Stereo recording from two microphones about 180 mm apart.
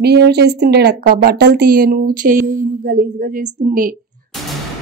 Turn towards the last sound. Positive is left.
turn(degrees=-50)  # may be behind; listen again after turning